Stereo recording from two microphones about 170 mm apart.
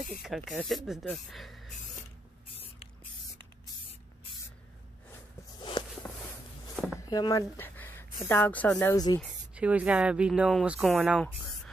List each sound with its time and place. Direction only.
0.2 s speech: centre (ahead or behind)
5.6 s walk: 25° left (ahead or behind)
7.0 s speech: 25° left (ahead or behind)
7.5 s speech: 10° left (ahead or behind)
9.6 s speech: 5° right (ahead or behind)